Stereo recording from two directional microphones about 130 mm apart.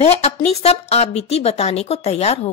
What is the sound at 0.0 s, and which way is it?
A woman's voice, 55° left (ahead or behind).